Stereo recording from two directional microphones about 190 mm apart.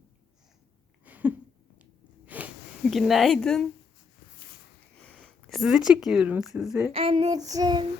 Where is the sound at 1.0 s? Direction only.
10° right (ahead or behind).